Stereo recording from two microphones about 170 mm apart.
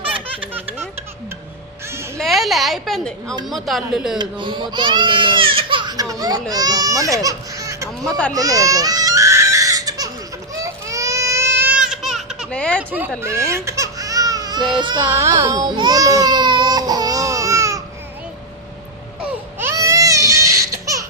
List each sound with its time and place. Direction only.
0.0 s baby laughter: 35° right (ahead or behind)
2.1 s a woman's voice: centre (ahead or behind)
4.2 s speech: 25° right (ahead or behind)
8.4 s baby cry: 20° right (ahead or behind)
11.6 s baby cry: 5° right (ahead or behind)
12.5 s speech: 5° left (ahead or behind)
13.2 s baby cry: 15° right (ahead or behind)
19.2 s baby cry: 10° right (ahead or behind)